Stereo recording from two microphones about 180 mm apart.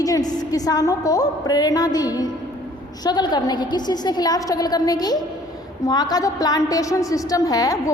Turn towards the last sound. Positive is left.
turn(degrees=20)  # may be behind; listen again after turning